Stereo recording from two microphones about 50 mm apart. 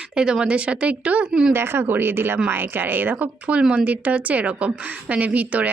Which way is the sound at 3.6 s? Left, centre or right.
Right.